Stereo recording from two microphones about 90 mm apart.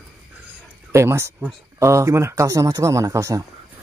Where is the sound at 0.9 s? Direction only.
30° right (ahead or behind).